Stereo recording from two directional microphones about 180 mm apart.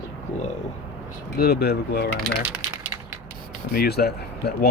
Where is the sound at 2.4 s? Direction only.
10° right (ahead or behind).